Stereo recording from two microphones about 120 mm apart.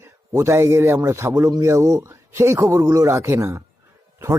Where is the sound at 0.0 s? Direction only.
20° right (ahead or behind).